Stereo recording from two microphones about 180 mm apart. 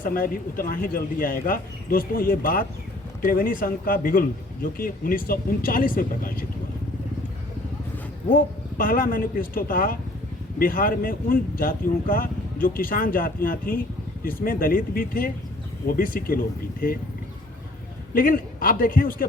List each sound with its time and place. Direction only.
0.0 s speech: 55° left (ahead or behind)
8.8 s speech: 50° left (ahead or behind)
18.1 s speech: 50° left (ahead or behind)